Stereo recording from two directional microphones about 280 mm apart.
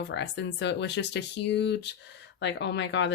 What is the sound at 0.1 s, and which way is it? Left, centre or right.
Speech, left.